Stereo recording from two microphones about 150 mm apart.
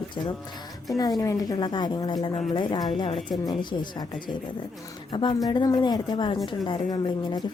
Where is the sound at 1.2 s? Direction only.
20° left (ahead or behind).